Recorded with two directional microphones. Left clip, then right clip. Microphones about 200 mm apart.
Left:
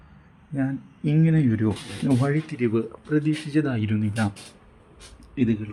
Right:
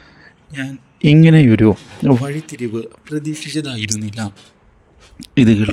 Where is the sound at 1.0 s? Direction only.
45° right (ahead or behind).